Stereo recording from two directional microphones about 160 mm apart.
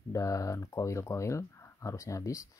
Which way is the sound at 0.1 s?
20° left (ahead or behind).